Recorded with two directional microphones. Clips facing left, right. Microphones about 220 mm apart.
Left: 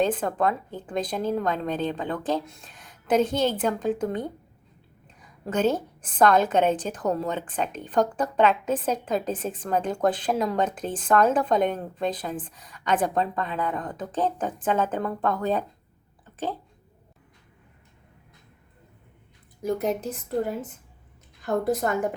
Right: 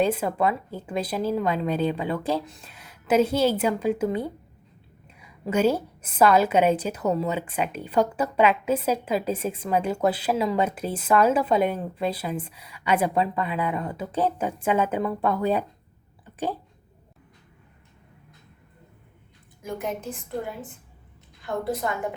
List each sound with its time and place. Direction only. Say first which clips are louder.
0.0 s a woman's voice: right 1 dB; 10° right (ahead or behind)
16.2 s a sound: right 2 dB; 15° right (ahead or behind)
19.6 s a woman's voice: left 5 dB; 35° left (ahead or behind)